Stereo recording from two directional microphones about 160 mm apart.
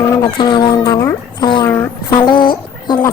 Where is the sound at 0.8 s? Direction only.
15° left (ahead or behind).